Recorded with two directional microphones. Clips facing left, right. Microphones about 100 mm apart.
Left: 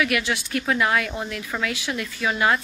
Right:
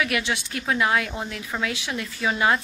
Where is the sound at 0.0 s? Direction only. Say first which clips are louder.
Left 2 dB; 25° right (ahead or behind).